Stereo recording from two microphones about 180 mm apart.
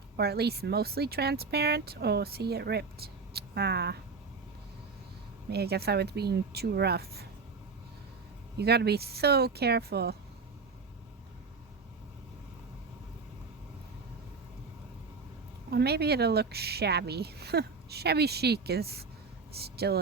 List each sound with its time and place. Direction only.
0.2 s speech: 60° right (ahead or behind)
5.5 s speech: 65° right (ahead or behind)
8.5 s speech: 65° right (ahead or behind)
15.7 s speech: 65° right (ahead or behind)